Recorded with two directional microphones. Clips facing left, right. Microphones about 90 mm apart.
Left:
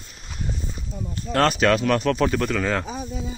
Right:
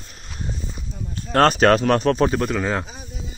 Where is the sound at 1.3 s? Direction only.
40° right (ahead or behind); by 2.8 s 20° right (ahead or behind).